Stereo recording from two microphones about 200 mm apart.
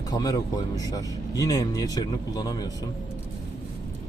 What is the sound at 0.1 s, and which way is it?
Speech, 20° left (ahead or behind).